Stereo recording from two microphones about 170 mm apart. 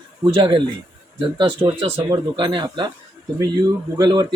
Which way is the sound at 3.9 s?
25° right (ahead or behind).